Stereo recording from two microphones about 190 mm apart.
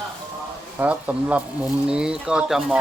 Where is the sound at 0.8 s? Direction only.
5° right (ahead or behind).